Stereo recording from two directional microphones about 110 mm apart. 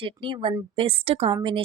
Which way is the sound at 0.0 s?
50° right (ahead or behind).